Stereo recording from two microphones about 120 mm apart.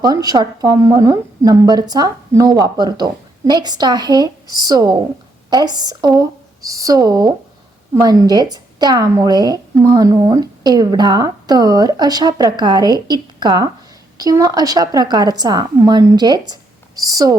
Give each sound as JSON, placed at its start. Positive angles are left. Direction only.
{"t": 0.0, "sound": "a woman's voice", "side_deg": -30}